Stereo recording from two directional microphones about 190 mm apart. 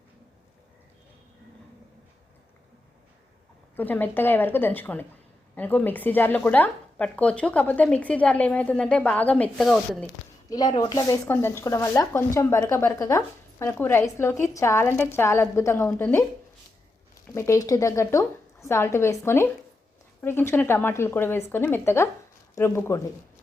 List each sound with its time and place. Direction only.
3.8 s speech: 10° left (ahead or behind)
10.5 s speech: 20° left (ahead or behind)
17.3 s speech: 15° left (ahead or behind)